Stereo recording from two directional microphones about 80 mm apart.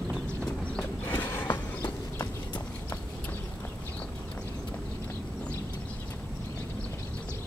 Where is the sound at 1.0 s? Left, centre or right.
Left.